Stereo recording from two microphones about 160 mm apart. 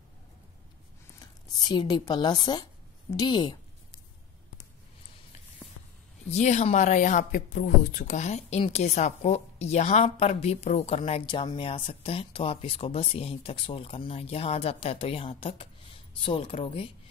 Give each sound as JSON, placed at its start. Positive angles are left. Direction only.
{"t": 1.2, "sound": "speech", "side_deg": 25}
{"t": 6.3, "sound": "speech", "side_deg": 45}